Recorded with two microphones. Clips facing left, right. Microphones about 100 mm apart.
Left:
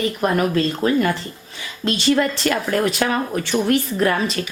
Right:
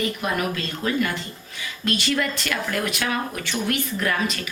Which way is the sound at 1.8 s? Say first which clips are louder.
Left 6 dB; 25° left (ahead or behind).